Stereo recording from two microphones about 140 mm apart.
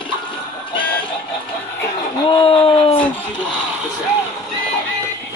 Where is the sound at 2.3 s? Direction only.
40° left (ahead or behind).